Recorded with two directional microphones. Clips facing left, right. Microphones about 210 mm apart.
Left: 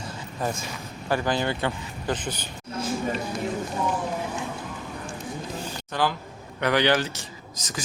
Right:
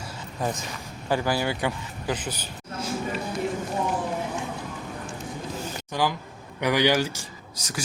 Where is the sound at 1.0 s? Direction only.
10° right (ahead or behind).